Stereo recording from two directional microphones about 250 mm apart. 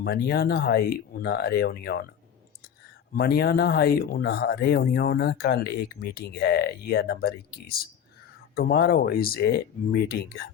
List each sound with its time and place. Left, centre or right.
0.0 s speech: left
3.2 s speech: left